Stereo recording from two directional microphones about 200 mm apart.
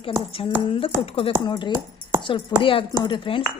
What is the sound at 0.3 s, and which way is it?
Speech, 30° left (ahead or behind).